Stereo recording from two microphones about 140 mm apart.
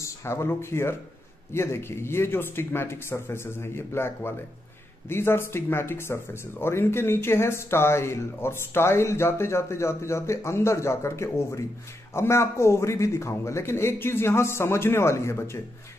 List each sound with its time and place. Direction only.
0.0 s speech: 20° left (ahead or behind)